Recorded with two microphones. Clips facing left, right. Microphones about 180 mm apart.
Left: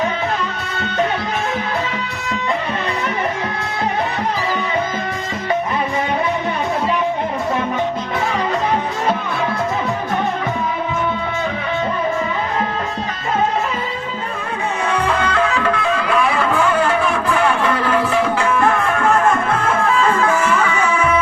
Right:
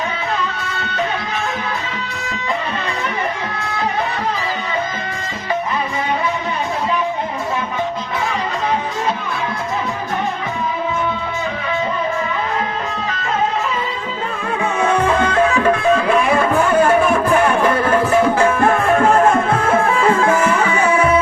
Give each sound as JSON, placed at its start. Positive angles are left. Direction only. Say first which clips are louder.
{"t": 14.8, "sound": "music", "louder": "right 3 dB", "side_deg": -50}
{"t": 20.6, "sound": "music", "louder": "right 2 dB", "side_deg": -30}